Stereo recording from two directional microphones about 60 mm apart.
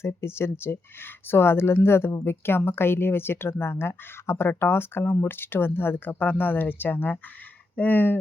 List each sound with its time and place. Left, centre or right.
0.0 s speech: left